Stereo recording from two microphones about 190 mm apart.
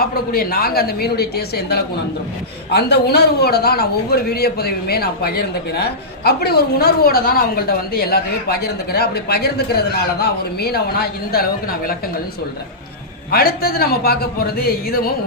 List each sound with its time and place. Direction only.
0.0 s a man's voice: 55° left (ahead or behind)
13.3 s speech: 50° left (ahead or behind)